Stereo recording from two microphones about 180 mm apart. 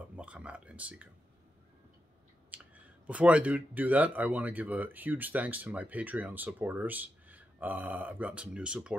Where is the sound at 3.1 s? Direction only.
5° right (ahead or behind).